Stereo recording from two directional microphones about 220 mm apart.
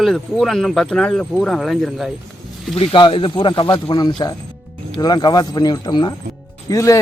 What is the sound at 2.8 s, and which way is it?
Speech, 25° left (ahead or behind).